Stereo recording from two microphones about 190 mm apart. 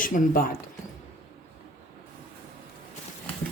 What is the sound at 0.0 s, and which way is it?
Speech, 45° left (ahead or behind).